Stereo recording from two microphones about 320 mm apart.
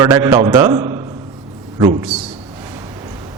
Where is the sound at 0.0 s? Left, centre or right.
Centre.